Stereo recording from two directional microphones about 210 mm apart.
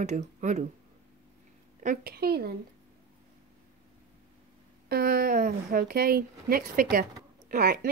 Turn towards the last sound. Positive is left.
turn(degrees=-45)  # may be behind; listen again after turning